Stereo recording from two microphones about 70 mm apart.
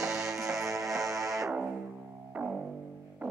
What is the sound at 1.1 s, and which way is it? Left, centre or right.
Music, right.